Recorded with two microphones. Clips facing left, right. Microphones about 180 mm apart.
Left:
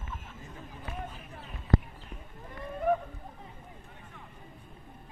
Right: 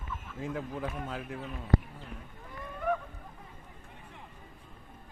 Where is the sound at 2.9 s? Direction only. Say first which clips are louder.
Left 4 dB; 35° left (ahead or behind).